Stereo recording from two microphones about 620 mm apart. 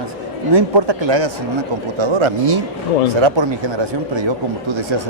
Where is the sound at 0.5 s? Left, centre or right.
Right.